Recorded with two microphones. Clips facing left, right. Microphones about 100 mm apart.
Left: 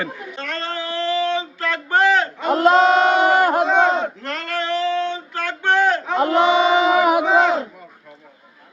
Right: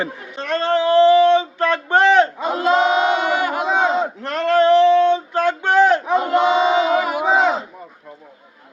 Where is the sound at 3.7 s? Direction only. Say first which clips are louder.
Left 2 dB; 10° right (ahead or behind).